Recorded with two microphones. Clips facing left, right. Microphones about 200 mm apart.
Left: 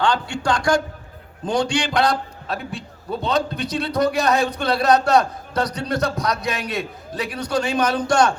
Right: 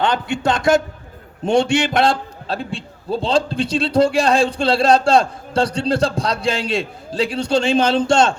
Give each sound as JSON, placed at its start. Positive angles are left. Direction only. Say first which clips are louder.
{"t": 0.0, "sound": "a man's voice", "louder": "right 2 dB", "side_deg": -20}